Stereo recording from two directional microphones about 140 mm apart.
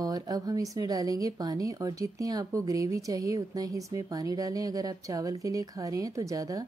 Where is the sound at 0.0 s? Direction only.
25° right (ahead or behind).